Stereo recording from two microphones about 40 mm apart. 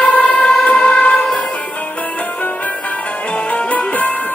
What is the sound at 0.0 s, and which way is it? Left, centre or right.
Music, left.